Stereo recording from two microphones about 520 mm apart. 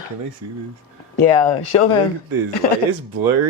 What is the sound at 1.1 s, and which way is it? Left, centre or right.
Speech, left.